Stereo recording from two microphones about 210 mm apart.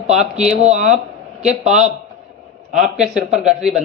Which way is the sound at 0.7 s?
35° right (ahead or behind).